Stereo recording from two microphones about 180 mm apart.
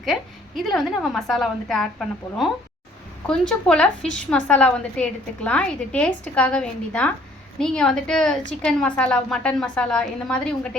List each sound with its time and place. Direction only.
0.0 s a woman's voice: centre (ahead or behind)